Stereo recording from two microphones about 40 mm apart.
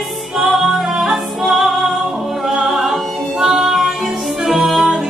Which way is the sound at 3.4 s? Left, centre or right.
Centre.